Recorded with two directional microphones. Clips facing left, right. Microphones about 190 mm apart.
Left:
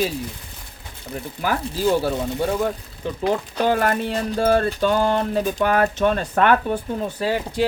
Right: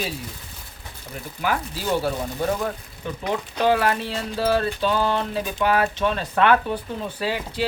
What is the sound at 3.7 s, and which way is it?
Speech, 45° left (ahead or behind).